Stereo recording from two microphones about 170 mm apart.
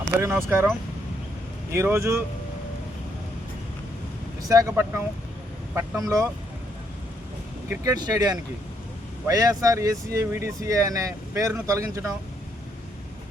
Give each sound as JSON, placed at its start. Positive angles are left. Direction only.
{"t": 0.4, "sound": "speech", "side_deg": -10}
{"t": 1.7, "sound": "speech", "side_deg": -15}
{"t": 4.4, "sound": "speech", "side_deg": -20}
{"t": 7.7, "sound": "speech", "side_deg": -20}